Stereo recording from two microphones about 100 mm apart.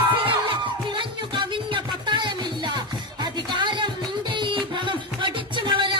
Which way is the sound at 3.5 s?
50° right (ahead or behind).